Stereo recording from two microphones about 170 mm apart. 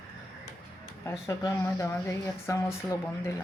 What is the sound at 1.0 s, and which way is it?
Speech, 20° left (ahead or behind).